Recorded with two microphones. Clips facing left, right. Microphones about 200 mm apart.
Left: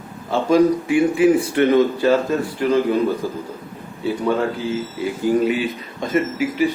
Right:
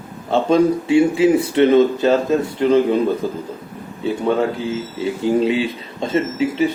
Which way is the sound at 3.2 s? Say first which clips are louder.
Right 2 dB; 25° right (ahead or behind).